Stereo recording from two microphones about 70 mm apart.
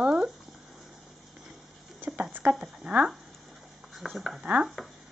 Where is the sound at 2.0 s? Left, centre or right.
Right.